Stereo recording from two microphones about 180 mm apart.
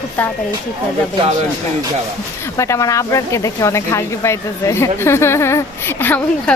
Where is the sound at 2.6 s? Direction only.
15° left (ahead or behind).